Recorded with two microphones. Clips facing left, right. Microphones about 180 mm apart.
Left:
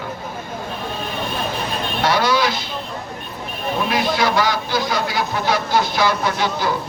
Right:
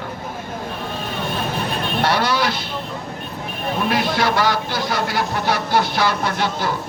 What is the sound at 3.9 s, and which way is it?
Speech, 55° right (ahead or behind).